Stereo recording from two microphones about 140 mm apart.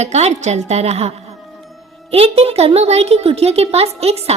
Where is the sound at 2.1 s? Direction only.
45° right (ahead or behind).